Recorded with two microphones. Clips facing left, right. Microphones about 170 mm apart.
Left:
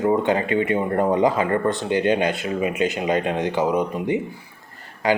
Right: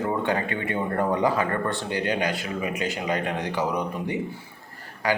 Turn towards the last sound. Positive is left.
turn(degrees=20)  # may be behind; listen again after turning